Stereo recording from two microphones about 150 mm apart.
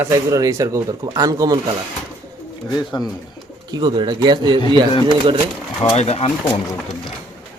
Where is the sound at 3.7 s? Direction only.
30° right (ahead or behind).